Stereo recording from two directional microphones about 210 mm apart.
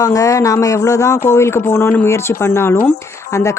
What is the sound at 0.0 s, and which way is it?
Speech, 15° left (ahead or behind).